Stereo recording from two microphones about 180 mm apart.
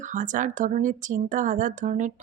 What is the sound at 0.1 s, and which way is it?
Speech, 45° right (ahead or behind).